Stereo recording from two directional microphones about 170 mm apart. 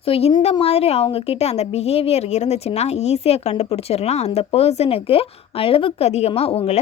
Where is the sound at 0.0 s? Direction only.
35° left (ahead or behind).